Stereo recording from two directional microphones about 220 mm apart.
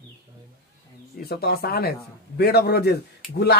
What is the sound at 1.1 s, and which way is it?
Speech, 45° left (ahead or behind).